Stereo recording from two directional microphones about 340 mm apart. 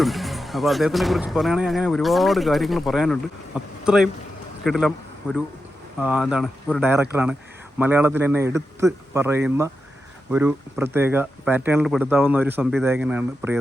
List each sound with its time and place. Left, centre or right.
0.0 s a man's voice: centre